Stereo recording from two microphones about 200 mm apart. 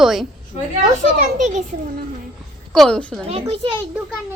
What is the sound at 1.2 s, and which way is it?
Speech, 40° right (ahead or behind).